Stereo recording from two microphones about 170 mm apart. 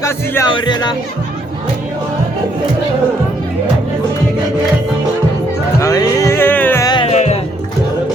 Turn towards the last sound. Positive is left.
turn(degrees=40)  # may be behind; listen again after turning